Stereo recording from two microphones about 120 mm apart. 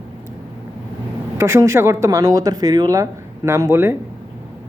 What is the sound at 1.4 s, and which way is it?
Speech, 20° right (ahead or behind).